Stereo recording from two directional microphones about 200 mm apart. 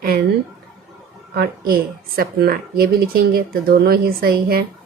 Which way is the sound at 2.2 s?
50° right (ahead or behind).